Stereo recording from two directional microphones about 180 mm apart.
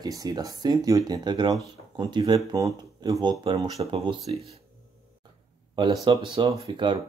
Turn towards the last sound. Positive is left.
turn(degrees=-25)  # may be behind; listen again after turning